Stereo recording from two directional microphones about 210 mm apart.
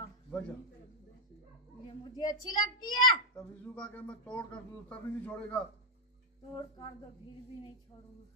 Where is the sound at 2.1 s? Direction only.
20° left (ahead or behind).